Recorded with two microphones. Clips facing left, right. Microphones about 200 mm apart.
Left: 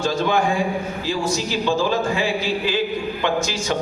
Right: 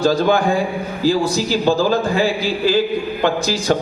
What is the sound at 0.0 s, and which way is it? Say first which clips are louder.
A man's voice: right 5 dB; 35° right (ahead or behind).